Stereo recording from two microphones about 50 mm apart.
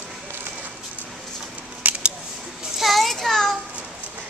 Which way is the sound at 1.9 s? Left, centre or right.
Right.